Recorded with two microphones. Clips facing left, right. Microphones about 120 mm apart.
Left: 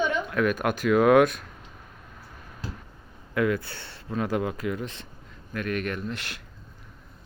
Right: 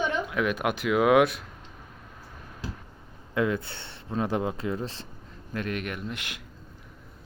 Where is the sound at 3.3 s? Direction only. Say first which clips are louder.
Left 1 dB; 20° right (ahead or behind).